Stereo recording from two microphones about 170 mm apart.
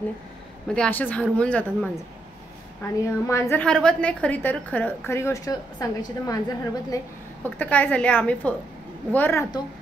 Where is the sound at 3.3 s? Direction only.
15° left (ahead or behind).